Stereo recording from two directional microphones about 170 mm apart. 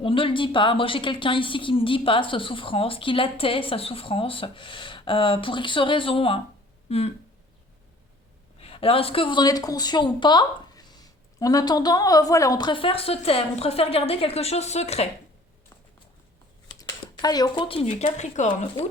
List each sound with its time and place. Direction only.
0.0 s a woman's voice: 30° left (ahead or behind)
8.5 s speech: 35° left (ahead or behind)
16.8 s speech: 25° left (ahead or behind)
18.0 s speech: 45° left (ahead or behind)